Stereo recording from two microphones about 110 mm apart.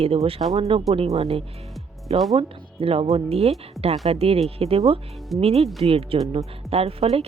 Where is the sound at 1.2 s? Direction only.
65° right (ahead or behind).